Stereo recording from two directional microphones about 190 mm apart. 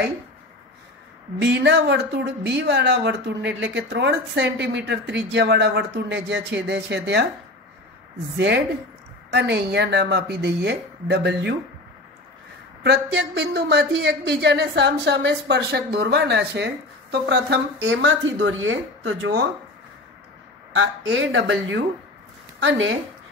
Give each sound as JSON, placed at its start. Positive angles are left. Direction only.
{"t": 1.4, "sound": "speech", "side_deg": -70}
{"t": 8.4, "sound": "speech", "side_deg": -65}
{"t": 12.8, "sound": "speech", "side_deg": -60}
{"t": 20.7, "sound": "a woman's voice", "side_deg": -90}